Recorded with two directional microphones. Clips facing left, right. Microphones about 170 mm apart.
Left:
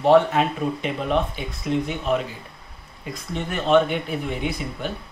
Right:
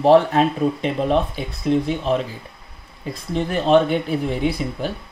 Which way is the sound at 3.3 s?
35° right (ahead or behind).